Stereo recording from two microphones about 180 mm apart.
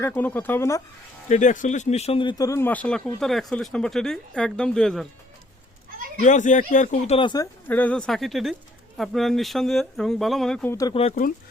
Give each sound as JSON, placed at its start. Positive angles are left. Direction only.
{"t": 0.0, "sound": "speech", "side_deg": 10}
{"t": 1.3, "sound": "a man's voice", "side_deg": 45}
{"t": 2.5, "sound": "speech", "side_deg": 10}
{"t": 6.1, "sound": "speech", "side_deg": 40}
{"t": 7.2, "sound": "speech", "side_deg": 25}
{"t": 7.7, "sound": "speech", "side_deg": 10}
{"t": 10.7, "sound": "speech", "side_deg": 20}
{"t": 11.1, "sound": "speech", "side_deg": 50}